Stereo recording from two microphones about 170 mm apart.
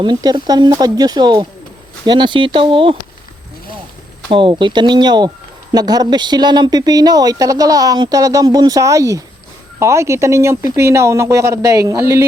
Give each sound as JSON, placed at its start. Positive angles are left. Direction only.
{"t": 0.0, "sound": "speech", "side_deg": -25}
{"t": 4.3, "sound": "speech", "side_deg": -30}